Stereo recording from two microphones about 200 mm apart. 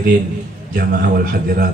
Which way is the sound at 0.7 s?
45° right (ahead or behind).